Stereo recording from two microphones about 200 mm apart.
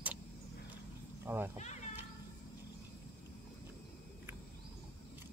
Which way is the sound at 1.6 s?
35° left (ahead or behind).